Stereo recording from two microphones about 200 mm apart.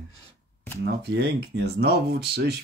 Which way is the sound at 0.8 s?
55° right (ahead or behind).